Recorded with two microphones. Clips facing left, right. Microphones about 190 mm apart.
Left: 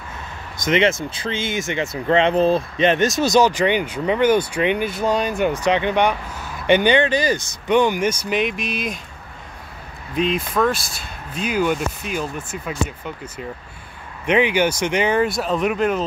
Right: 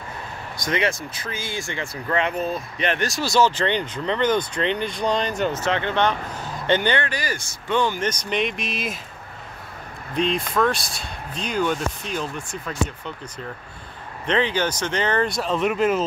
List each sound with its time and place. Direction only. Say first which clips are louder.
0.6 s speech: left 6 dB; 20° left (ahead or behind); by 8.9 s centre (ahead or behind)
10.1 s speech: left 2 dB; 5° left (ahead or behind)